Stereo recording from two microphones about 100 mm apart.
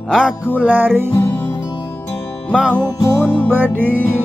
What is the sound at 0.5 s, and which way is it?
Music, 15° right (ahead or behind).